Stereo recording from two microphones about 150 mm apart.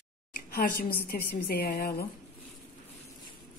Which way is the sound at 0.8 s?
90° left.